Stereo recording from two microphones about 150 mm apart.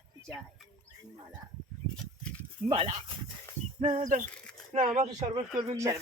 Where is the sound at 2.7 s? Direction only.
40° right (ahead or behind).